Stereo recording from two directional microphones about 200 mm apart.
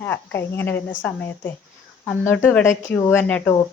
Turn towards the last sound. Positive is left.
turn(degrees=10)  # may be behind; listen again after turning